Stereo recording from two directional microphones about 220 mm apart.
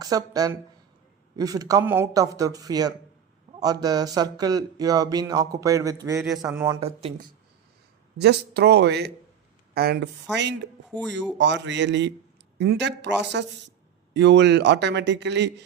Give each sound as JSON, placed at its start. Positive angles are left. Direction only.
{"t": 0.0, "sound": "speech", "side_deg": -15}
{"t": 8.2, "sound": "speech", "side_deg": -50}